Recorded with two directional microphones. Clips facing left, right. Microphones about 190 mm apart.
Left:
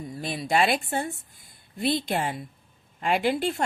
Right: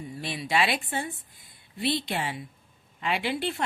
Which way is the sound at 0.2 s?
40° left (ahead or behind).